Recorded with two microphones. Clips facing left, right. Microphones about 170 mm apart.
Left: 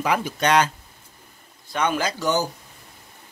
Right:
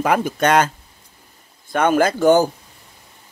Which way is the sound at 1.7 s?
50° right (ahead or behind).